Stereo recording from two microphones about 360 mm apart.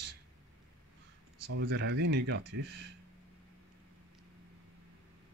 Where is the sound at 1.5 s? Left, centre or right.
Right.